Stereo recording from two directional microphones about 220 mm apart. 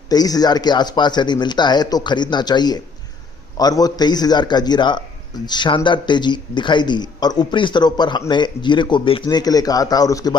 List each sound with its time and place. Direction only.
0.1 s a man's voice: 15° left (ahead or behind)